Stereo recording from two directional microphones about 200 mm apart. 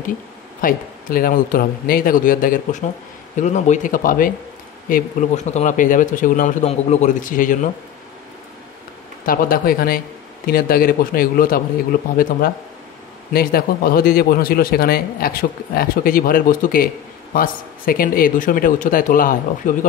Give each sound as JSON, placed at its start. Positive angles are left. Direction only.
{"t": 0.6, "sound": "a man's voice", "side_deg": 45}
{"t": 9.2, "sound": "a man's voice", "side_deg": 45}